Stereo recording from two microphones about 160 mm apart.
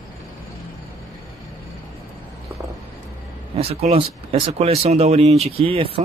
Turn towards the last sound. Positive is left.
turn(degrees=-35)  # may be behind; listen again after turning